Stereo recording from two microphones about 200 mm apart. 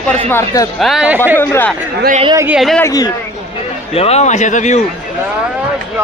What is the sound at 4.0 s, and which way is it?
Speech, 30° left (ahead or behind).